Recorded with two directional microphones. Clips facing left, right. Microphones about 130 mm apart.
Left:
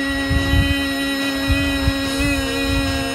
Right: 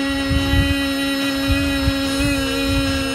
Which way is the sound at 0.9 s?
45° left (ahead or behind).